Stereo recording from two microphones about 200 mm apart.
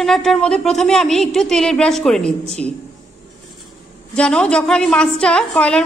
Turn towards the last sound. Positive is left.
turn(degrees=5)  # may be behind; listen again after turning